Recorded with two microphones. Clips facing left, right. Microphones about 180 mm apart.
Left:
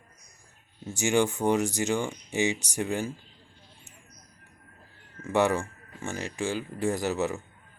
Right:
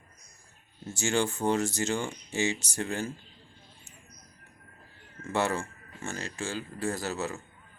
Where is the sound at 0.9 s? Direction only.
15° left (ahead or behind).